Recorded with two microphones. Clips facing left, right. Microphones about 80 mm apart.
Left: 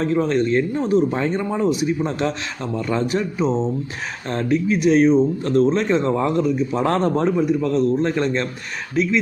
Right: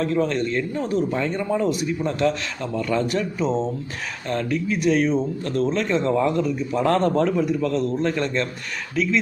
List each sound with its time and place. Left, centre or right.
0.0 s speech: left